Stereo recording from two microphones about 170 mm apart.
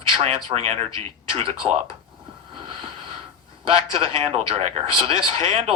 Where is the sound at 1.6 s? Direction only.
25° right (ahead or behind).